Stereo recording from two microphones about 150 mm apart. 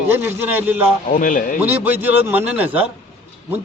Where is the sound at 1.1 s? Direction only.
60° left (ahead or behind).